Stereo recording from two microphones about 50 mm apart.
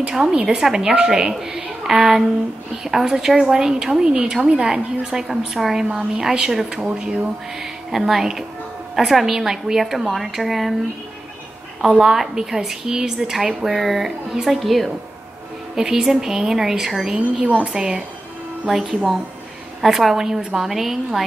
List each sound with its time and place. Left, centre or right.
0.1 s a woman's voice: centre
7.9 s a woman's voice: centre
12.0 s a woman's voice: centre